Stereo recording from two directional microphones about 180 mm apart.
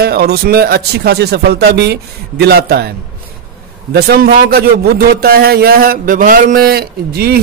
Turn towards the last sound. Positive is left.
turn(degrees=-60)  # may be behind; listen again after turning